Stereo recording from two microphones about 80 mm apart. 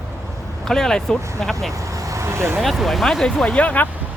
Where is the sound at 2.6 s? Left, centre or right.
Centre.